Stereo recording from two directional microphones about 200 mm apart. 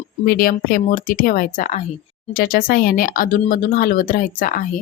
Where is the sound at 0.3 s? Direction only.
45° left (ahead or behind).